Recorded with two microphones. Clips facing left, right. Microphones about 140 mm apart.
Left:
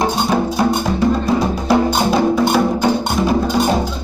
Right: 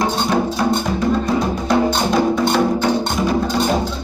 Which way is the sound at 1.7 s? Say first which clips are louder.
Left 2 dB; 10° left (ahead or behind).